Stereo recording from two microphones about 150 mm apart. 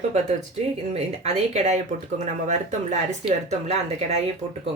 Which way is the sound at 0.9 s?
45° right (ahead or behind).